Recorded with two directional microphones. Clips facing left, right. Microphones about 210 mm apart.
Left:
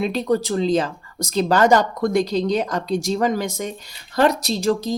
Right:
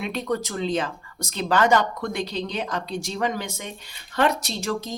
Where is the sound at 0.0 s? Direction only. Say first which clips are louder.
Left 6 dB; 35° left (ahead or behind).